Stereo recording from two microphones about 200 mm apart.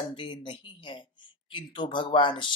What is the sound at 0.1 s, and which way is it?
Speech, 25° left (ahead or behind).